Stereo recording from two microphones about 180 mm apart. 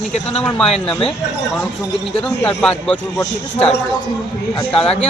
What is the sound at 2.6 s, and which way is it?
Speech, 5° left (ahead or behind).